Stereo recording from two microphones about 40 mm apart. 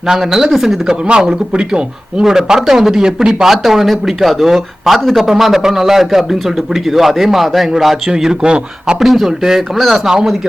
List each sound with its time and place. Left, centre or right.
0.1 s speech: centre
1.2 s speech: right
2.2 s speech: centre
5.3 s speech: centre
8.1 s speech: centre
9.0 s speech: centre